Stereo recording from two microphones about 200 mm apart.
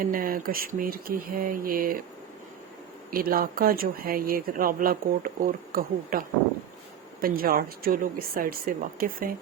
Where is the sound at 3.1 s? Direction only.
45° right (ahead or behind).